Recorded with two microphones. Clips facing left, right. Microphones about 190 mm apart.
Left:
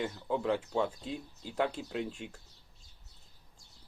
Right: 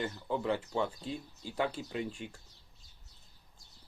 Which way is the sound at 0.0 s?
Centre (ahead or behind).